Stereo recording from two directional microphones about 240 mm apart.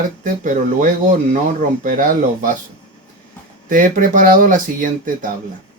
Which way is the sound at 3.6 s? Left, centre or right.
Right.